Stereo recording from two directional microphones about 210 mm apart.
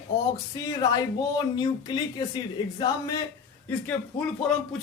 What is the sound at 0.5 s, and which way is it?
Speech, 15° left (ahead or behind).